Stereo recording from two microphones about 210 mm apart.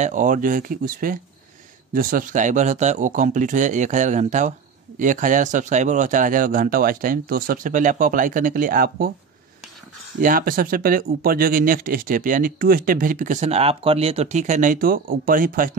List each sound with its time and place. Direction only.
0.0 s speech: 35° right (ahead or behind)
10.2 s speech: 40° right (ahead or behind)